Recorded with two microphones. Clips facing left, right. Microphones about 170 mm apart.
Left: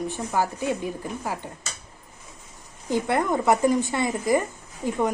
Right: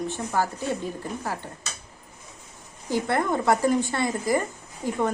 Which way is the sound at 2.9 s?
15° left (ahead or behind).